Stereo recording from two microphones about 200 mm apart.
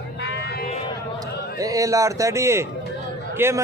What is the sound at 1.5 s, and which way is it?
A man's voice, 15° right (ahead or behind).